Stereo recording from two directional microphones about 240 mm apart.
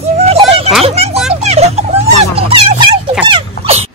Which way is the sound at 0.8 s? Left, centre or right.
Right.